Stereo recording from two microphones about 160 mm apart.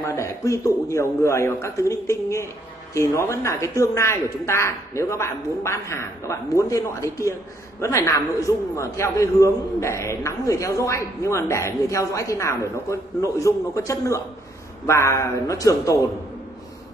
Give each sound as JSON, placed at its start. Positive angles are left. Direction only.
{"t": 0.0, "sound": "a man's voice", "side_deg": 20}